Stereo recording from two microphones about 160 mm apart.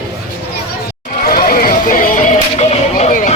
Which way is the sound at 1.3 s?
65° left (ahead or behind).